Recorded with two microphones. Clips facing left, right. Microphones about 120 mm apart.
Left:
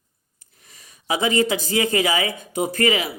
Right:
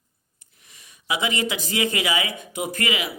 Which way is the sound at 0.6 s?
35° left (ahead or behind).